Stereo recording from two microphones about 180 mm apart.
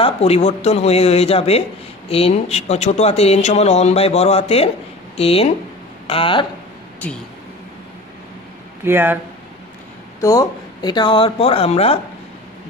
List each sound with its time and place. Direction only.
0.0 s speech: 35° left (ahead or behind)
8.8 s speech: 10° right (ahead or behind)
10.2 s speech: 20° left (ahead or behind); by 12.0 s 35° left (ahead or behind)